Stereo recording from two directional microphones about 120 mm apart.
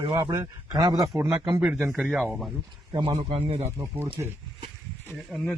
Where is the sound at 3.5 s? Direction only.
70° right (ahead or behind).